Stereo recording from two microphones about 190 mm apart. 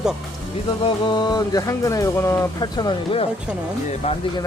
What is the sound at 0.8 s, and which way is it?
Speech, 25° left (ahead or behind).